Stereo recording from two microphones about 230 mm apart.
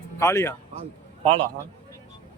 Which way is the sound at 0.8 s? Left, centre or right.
Right.